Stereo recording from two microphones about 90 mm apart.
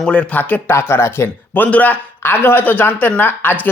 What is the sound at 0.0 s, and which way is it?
Speech, 10° left (ahead or behind).